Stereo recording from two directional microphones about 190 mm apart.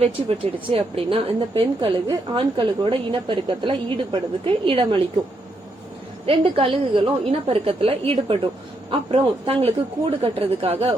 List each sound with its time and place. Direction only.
0.0 s a woman's voice: 30° right (ahead or behind)
6.2 s a woman's voice: 30° right (ahead or behind)